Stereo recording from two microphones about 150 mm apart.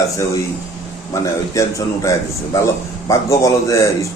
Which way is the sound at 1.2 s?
20° left (ahead or behind).